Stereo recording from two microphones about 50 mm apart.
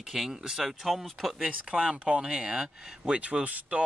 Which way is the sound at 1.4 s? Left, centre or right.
Centre.